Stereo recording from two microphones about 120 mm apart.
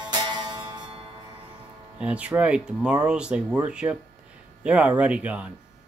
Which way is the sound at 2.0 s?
10° right (ahead or behind).